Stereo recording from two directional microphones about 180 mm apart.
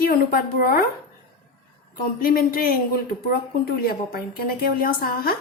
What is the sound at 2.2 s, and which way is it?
Speech, 55° left (ahead or behind).